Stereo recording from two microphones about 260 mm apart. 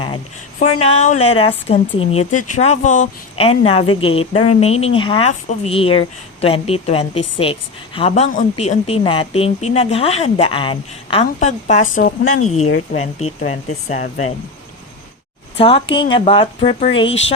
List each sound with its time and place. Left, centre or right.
0.6 s a woman's voice: left
15.5 s a woman's voice: centre